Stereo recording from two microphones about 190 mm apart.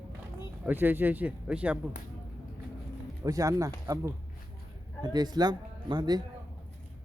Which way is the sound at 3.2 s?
15° right (ahead or behind).